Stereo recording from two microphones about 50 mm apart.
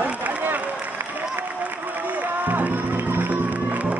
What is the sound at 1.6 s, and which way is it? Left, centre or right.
Music, right.